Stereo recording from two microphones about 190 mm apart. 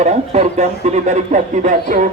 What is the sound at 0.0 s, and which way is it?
Speech, 35° right (ahead or behind).